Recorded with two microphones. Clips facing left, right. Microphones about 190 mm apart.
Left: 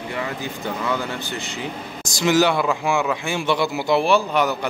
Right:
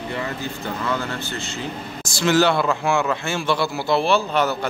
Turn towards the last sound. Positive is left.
turn(degrees=15)  # may be behind; listen again after turning